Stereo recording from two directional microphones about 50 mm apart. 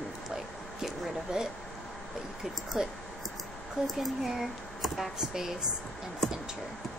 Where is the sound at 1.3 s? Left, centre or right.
Centre.